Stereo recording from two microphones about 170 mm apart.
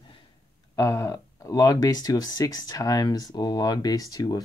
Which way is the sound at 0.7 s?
20° left (ahead or behind).